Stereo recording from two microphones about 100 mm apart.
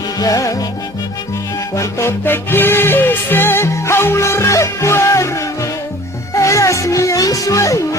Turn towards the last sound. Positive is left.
turn(degrees=30)  # may be behind; listen again after turning